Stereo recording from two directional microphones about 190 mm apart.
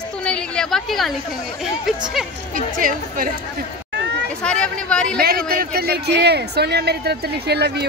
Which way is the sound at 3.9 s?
65° right (ahead or behind).